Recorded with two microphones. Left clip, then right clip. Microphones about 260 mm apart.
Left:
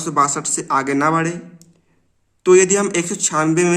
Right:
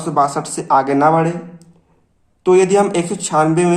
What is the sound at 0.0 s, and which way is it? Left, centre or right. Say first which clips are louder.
A man's voice: right 2 dB; left.